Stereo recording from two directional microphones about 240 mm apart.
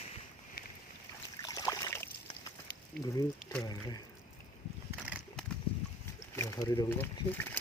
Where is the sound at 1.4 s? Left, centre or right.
Centre.